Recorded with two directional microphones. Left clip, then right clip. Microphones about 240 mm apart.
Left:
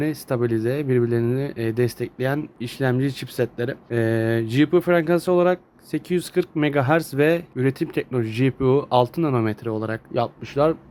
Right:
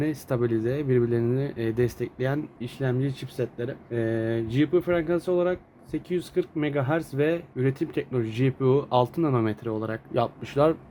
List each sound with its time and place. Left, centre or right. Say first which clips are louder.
0.0 s speech: left 3 dB; centre
2.6 s speech: left 6 dB; centre